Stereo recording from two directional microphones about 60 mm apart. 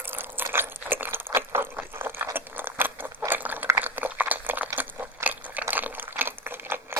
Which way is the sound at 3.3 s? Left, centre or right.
Right.